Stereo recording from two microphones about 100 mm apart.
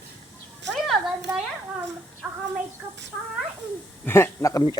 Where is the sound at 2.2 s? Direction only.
15° right (ahead or behind).